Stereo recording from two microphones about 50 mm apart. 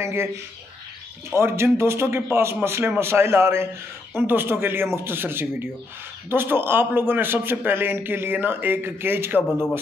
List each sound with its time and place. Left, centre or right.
0.0 s speech: right
1.3 s speech: right
4.2 s a man's voice: right